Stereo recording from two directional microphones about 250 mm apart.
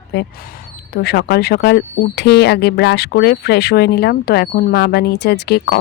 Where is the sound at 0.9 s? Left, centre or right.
Left.